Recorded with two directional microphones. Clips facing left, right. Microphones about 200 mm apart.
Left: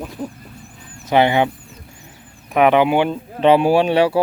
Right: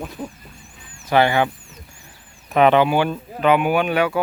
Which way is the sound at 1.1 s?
20° left (ahead or behind).